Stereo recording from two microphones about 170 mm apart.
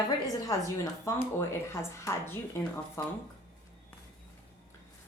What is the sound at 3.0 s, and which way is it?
Speech, 20° left (ahead or behind).